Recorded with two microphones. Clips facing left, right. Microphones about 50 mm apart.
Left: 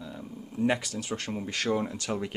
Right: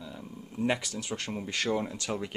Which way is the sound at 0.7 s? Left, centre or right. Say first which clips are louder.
Left 2 dB; centre.